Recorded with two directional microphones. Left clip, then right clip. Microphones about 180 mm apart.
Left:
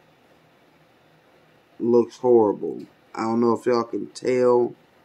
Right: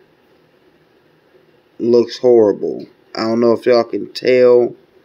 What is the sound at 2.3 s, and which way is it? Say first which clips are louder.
Speech: right 6 dB; 20° right (ahead or behind).